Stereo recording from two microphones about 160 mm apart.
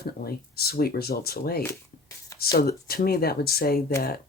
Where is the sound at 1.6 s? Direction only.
20° left (ahead or behind).